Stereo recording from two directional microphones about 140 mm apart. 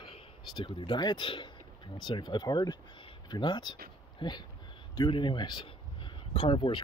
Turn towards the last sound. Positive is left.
turn(degrees=35)  # may be behind; listen again after turning